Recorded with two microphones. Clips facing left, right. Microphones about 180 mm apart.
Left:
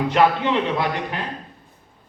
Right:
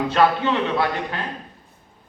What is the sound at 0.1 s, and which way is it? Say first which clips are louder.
A man's voice: left 1 dB; 15° left (ahead or behind).